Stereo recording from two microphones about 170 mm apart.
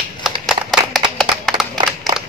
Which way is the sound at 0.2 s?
Centre (ahead or behind).